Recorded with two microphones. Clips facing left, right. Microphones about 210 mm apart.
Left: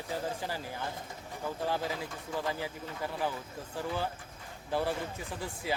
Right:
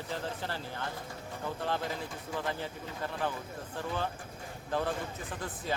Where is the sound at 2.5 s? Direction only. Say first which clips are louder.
Left 1 dB; 10° left (ahead or behind).